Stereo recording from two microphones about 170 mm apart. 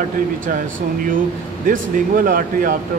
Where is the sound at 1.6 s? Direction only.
50° right (ahead or behind).